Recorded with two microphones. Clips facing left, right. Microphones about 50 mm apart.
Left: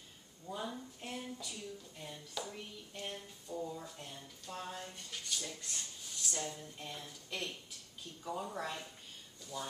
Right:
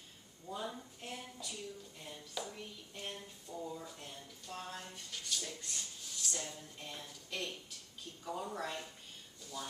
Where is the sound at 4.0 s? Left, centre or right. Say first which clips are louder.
Left 1 dB; centre.